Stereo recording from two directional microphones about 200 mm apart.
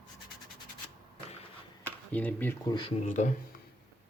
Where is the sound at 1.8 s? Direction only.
10° left (ahead or behind).